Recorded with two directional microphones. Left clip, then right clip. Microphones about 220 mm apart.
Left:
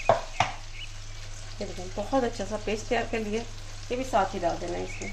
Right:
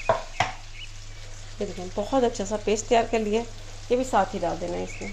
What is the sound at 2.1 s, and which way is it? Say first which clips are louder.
Speech: right 4 dB; 25° right (ahead or behind).